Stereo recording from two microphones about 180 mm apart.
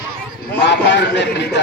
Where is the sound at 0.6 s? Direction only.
75° left (ahead or behind).